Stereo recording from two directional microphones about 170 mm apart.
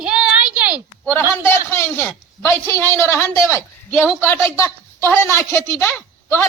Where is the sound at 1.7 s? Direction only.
15° left (ahead or behind).